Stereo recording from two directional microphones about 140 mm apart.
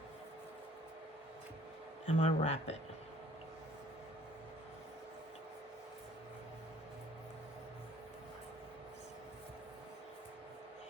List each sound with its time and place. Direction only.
2.0 s speech: 55° left (ahead or behind)